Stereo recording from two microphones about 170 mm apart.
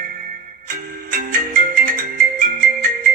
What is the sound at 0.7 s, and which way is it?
Music, 55° right (ahead or behind).